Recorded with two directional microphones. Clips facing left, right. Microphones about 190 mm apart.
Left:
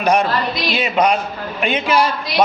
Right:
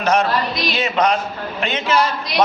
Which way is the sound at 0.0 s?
15° left (ahead or behind).